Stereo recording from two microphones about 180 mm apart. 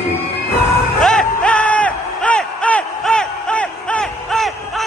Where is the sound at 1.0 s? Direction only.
5° left (ahead or behind).